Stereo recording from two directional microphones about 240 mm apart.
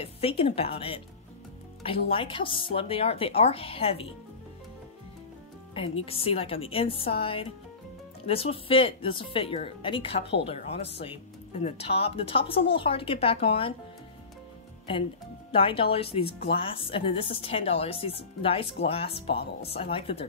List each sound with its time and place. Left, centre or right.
0.0 s speech: left
2.0 s speech: left
6.0 s speech: left
15.5 s speech: left